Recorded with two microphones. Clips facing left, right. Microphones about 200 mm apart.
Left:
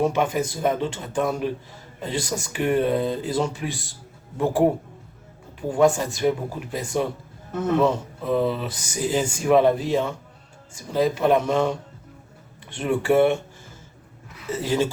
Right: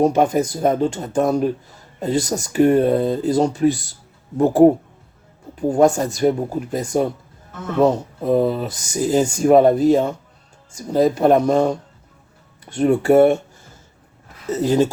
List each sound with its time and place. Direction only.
0.0 s speech: 40° right (ahead or behind)